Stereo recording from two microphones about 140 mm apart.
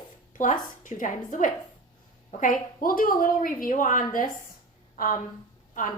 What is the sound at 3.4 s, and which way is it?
A woman's voice, 75° left (ahead or behind).